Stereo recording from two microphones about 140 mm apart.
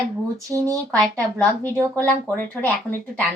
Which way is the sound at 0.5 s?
25° right (ahead or behind).